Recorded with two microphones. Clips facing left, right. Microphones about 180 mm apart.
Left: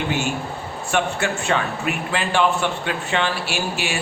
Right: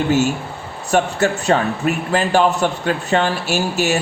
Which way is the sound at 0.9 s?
40° right (ahead or behind).